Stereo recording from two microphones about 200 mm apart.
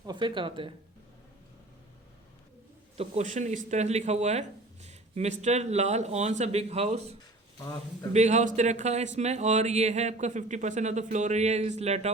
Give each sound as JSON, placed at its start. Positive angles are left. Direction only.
{"t": 0.0, "sound": "speech", "side_deg": -20}
{"t": 3.0, "sound": "speech", "side_deg": -35}